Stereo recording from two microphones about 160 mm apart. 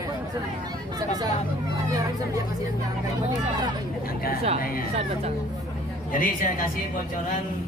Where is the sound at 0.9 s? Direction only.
25° right (ahead or behind).